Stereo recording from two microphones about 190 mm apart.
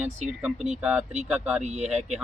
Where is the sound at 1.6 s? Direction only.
35° right (ahead or behind).